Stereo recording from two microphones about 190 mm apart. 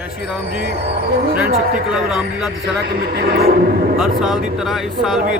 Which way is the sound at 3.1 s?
55° right (ahead or behind).